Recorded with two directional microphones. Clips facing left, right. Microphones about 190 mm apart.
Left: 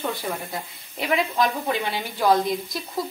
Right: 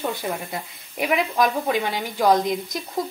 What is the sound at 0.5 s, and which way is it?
Speech, 15° right (ahead or behind).